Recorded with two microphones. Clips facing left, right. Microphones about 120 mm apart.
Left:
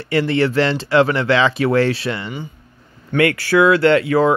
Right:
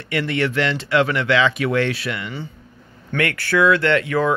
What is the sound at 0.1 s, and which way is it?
Speech, 30° left (ahead or behind).